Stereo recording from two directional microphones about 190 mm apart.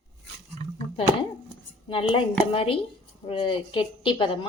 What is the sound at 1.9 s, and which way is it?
Speech, 30° left (ahead or behind).